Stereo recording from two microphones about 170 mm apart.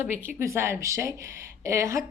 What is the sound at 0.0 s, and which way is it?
Speech, 10° right (ahead or behind).